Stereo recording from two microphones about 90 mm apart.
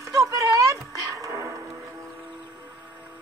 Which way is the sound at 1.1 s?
40° right (ahead or behind).